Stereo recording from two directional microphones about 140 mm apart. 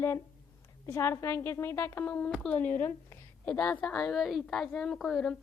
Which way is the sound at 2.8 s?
15° left (ahead or behind).